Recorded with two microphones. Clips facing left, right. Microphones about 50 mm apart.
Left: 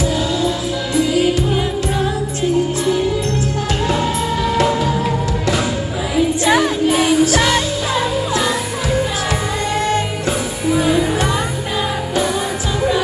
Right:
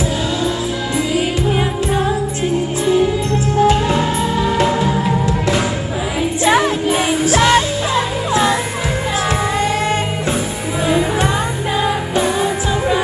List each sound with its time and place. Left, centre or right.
1.4 s music: right
3.6 s music: right
4.8 s music: right
6.4 s music: centre
9.8 s music: right